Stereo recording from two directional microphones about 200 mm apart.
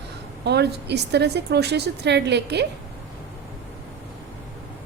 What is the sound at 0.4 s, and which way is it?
A woman's voice, 55° right (ahead or behind).